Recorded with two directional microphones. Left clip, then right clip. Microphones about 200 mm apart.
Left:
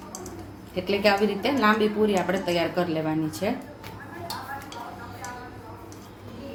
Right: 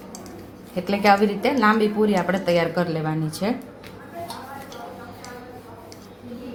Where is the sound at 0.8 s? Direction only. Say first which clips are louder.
Right 4 dB; 25° right (ahead or behind).